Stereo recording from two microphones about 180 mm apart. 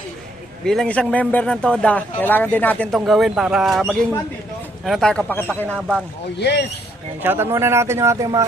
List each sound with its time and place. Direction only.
0.6 s speech: 5° left (ahead or behind)
6.4 s speech: 70° left (ahead or behind)
7.2 s speech: 10° right (ahead or behind)